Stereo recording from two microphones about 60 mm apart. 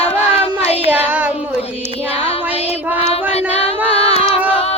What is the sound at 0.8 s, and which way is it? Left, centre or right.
Child singing, right.